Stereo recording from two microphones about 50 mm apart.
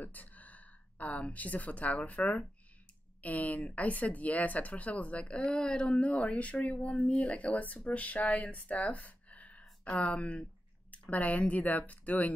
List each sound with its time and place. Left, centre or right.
0.0 s speech: left